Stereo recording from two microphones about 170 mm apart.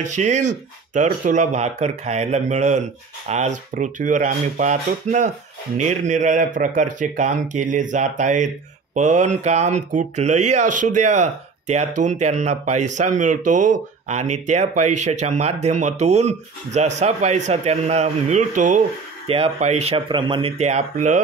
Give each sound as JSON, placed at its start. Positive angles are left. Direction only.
{"t": 0.0, "sound": "speech", "side_deg": -45}
{"t": 19.2, "sound": "speech", "side_deg": -35}